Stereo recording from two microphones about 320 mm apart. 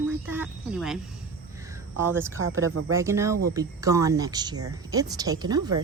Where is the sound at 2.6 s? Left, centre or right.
Right.